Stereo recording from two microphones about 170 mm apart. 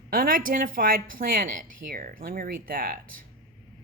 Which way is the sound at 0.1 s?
55° right (ahead or behind).